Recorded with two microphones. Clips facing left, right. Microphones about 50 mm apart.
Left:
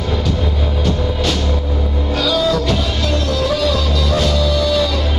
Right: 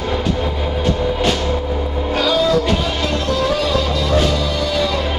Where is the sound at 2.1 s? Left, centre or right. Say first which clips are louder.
Right 1 dB; centre.